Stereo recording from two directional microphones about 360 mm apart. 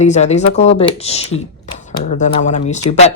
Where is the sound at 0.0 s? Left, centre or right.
Centre.